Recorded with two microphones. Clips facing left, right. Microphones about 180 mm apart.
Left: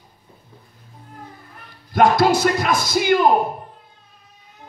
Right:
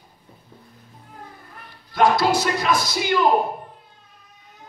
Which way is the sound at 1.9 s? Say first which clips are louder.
Left 3 dB; 50° left (ahead or behind).